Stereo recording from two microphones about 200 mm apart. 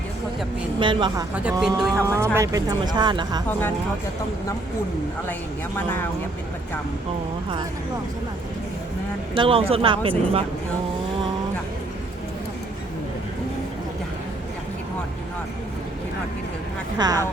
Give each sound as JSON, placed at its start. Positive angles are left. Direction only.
{"t": 0.8, "sound": "speech", "side_deg": -25}
{"t": 1.6, "sound": "speech", "side_deg": 0}
{"t": 2.0, "sound": "speech", "side_deg": -15}
{"t": 9.3, "sound": "speech", "side_deg": -25}
{"t": 17.0, "sound": "speech", "side_deg": -20}